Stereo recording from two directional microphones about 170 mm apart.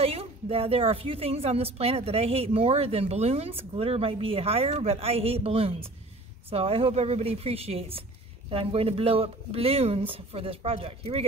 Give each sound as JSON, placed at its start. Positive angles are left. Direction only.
{"t": 0.0, "sound": "a woman's voice", "side_deg": -35}